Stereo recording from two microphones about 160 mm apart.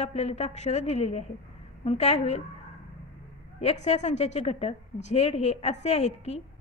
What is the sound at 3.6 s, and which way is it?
A woman's voice, 40° left (ahead or behind).